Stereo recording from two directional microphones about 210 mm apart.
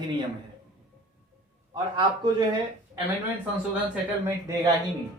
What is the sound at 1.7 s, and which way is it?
Speech, 20° right (ahead or behind).